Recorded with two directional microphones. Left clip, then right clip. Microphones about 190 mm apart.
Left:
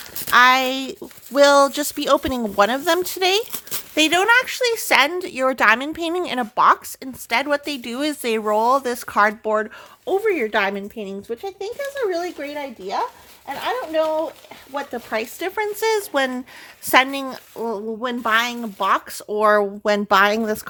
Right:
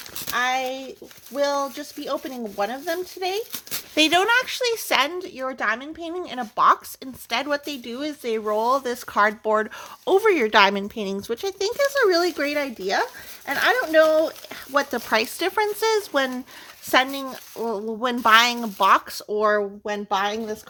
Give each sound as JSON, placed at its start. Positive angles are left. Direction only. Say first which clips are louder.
{"t": 0.3, "sound": "speech", "louder": "left 10 dB", "side_deg": 45}
{"t": 3.9, "sound": "speech", "louder": "left 3 dB", "side_deg": 5}
{"t": 5.2, "sound": "a woman's voice", "louder": "left 9 dB", "side_deg": 30}
{"t": 6.6, "sound": "speech", "louder": "left 2 dB", "side_deg": 10}
{"t": 9.4, "sound": "speech", "louder": "left 1 dB", "side_deg": 0}
{"t": 10.1, "sound": "speech", "louder": "right 2 dB", "side_deg": -20}
{"t": 11.3, "sound": "speech", "louder": "right 3 dB", "side_deg": -35}
{"t": 15.1, "sound": "speech", "louder": "right 3 dB", "side_deg": -15}
{"t": 18.0, "sound": "speech", "louder": "right 4 dB", "side_deg": -10}
{"t": 19.1, "sound": "speech", "louder": "left 4 dB", "side_deg": 10}
{"t": 19.8, "sound": "speech", "louder": "left 8 dB", "side_deg": 50}